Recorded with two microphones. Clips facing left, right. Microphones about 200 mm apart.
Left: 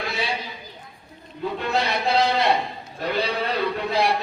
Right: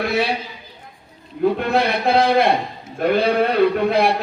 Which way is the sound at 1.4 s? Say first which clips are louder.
Right 7 dB; 55° right (ahead or behind).